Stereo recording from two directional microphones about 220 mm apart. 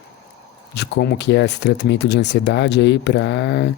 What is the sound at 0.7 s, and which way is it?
Speech, 50° left (ahead or behind).